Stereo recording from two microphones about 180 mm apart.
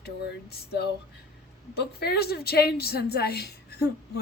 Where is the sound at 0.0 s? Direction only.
60° left (ahead or behind).